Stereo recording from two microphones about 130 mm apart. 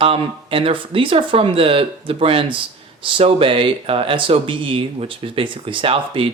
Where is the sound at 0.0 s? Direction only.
45° right (ahead or behind).